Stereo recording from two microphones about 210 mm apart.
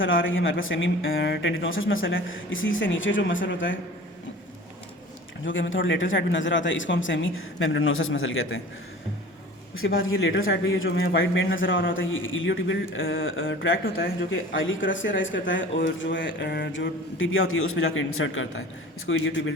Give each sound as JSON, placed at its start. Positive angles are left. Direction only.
{"t": 0.0, "sound": "speech", "side_deg": 65}
{"t": 5.5, "sound": "speech", "side_deg": 65}
{"t": 9.7, "sound": "a man's voice", "side_deg": 75}